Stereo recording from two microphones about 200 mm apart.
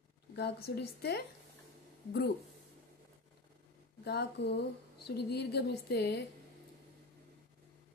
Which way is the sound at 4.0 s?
55° left (ahead or behind).